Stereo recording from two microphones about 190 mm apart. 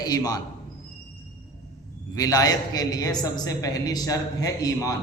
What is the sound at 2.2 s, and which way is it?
A woman's voice, 20° left (ahead or behind).